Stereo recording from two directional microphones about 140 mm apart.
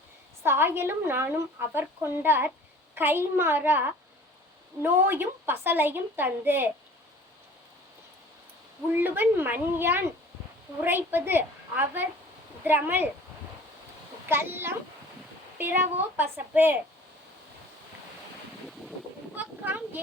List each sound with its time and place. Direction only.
0.4 s a woman's voice: 15° right (ahead or behind)
8.9 s a woman's voice: 15° right (ahead or behind)
14.3 s a woman's voice: 15° right (ahead or behind)
19.4 s speech: 15° right (ahead or behind)